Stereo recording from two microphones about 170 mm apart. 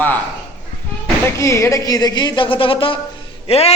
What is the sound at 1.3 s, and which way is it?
A woman's voice, 15° left (ahead or behind).